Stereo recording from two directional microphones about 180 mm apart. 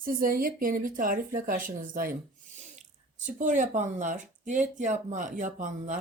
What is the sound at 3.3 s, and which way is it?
A woman's voice, 45° right (ahead or behind).